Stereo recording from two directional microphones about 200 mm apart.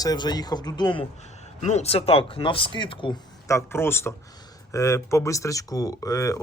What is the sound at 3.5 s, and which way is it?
Speech, 15° left (ahead or behind).